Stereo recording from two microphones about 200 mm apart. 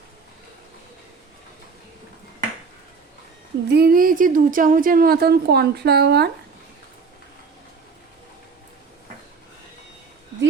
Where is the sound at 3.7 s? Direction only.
50° right (ahead or behind).